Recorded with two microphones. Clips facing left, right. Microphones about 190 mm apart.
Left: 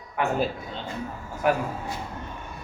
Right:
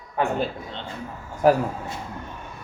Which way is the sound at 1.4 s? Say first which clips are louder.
Right 6 dB; 35° right (ahead or behind).